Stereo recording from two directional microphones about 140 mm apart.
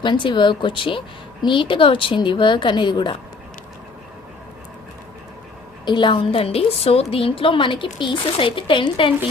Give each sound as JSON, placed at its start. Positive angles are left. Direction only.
{"t": 0.0, "sound": "a woman's voice", "side_deg": 35}
{"t": 5.8, "sound": "a woman's voice", "side_deg": 35}